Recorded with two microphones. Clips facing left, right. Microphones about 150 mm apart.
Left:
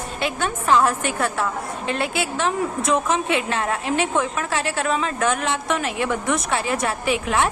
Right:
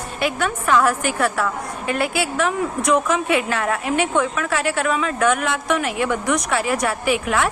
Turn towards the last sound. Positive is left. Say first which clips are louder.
# right 1 dB
turn(degrees=25)  # may be behind; listen again after turning